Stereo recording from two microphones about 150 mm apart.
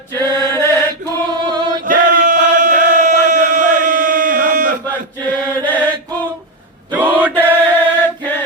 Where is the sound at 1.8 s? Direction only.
65° right (ahead or behind).